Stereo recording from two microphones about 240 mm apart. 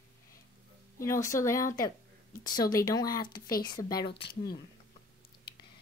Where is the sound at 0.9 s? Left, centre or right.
Centre.